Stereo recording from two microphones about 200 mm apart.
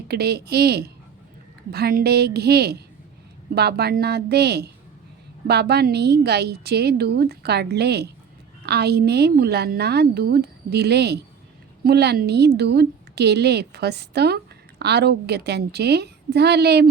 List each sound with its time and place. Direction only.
0.1 s a woman's voice: 55° right (ahead or behind)